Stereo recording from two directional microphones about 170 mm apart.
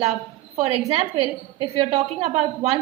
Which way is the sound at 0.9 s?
35° right (ahead or behind).